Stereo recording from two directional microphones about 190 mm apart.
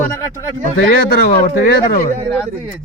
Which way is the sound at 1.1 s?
55° left (ahead or behind).